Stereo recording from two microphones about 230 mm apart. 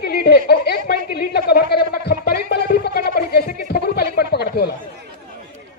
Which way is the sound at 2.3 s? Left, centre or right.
Left.